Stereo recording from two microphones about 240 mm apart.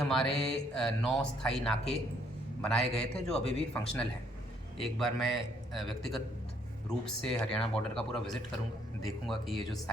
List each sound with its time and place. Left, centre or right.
0.0 s speech: centre